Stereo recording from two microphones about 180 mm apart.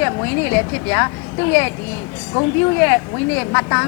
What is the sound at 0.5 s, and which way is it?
Speech, 15° left (ahead or behind).